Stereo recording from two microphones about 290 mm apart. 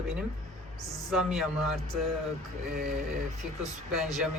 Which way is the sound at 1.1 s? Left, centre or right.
Centre.